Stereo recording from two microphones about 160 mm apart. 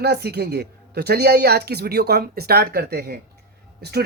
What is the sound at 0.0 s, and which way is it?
Speech, 90° right.